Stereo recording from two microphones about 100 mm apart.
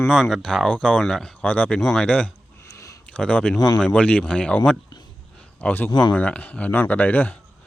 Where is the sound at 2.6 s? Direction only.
30° left (ahead or behind).